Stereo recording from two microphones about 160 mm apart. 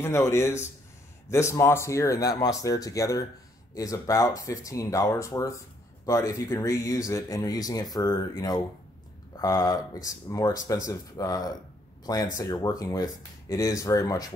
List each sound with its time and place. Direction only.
0.0 s a man's voice: 15° left (ahead or behind)